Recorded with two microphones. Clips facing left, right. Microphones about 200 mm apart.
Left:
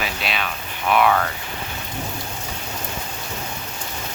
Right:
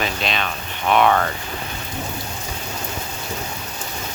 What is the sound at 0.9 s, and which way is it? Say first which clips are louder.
Speech: right 1 dB; 35° right (ahead or behind).